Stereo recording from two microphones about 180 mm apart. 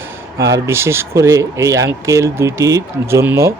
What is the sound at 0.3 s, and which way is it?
Speech, 15° right (ahead or behind).